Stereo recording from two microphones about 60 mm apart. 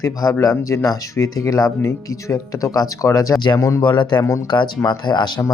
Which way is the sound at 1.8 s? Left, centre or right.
Left.